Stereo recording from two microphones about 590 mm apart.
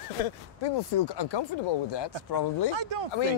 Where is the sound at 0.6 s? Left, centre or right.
Left.